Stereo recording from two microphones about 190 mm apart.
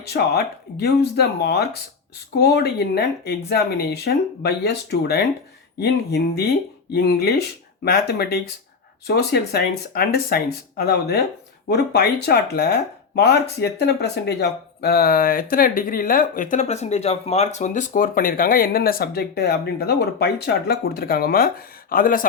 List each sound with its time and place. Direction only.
0.1 s speech: 60° left (ahead or behind)